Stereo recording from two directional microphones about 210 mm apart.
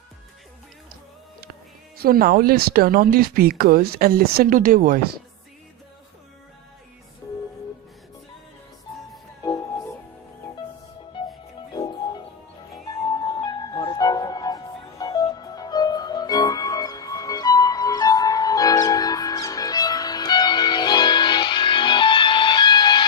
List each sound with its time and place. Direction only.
2.0 s speech: 45° right (ahead or behind)
9.4 s music: 15° left (ahead or behind)
11.7 s music: 20° left (ahead or behind)